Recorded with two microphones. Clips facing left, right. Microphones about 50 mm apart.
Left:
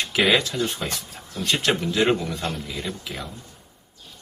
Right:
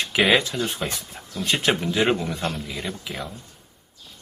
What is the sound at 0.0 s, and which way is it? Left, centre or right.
Speech, centre.